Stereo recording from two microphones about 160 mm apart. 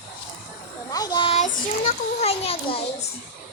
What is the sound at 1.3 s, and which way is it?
Child singing, 50° left (ahead or behind).